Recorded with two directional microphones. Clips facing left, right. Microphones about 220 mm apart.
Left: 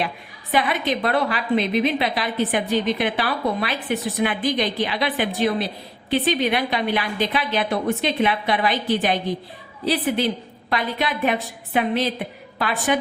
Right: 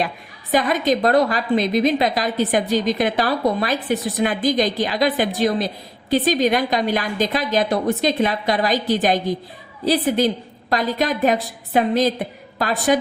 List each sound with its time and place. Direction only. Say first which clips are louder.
0.5 s a woman's voice: right 4 dB; 40° right (ahead or behind)